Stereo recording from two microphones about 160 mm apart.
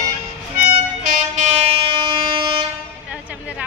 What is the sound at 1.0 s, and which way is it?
Train, 50° right (ahead or behind).